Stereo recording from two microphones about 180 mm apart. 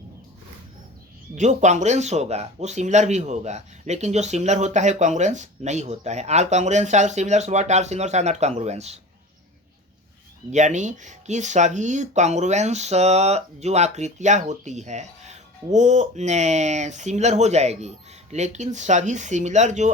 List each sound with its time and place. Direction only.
1.4 s speech: 40° right (ahead or behind)
10.5 s speech: 40° right (ahead or behind)